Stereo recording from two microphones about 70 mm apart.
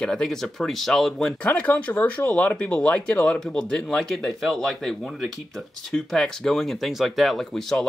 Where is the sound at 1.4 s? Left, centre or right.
Left.